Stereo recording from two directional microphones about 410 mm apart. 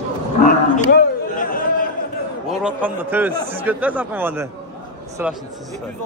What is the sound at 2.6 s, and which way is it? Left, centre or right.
Speech, centre.